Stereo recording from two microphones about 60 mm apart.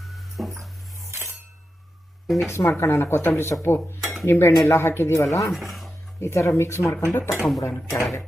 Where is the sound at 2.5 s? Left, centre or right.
Left.